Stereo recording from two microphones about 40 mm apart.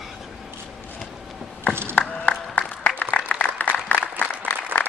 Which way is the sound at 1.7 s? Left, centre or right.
Left.